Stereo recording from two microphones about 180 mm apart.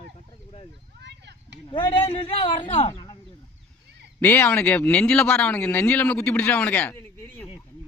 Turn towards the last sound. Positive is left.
turn(degrees=10)  # may be behind; listen again after turning